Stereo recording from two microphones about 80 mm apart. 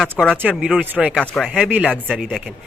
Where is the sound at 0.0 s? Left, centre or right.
Centre.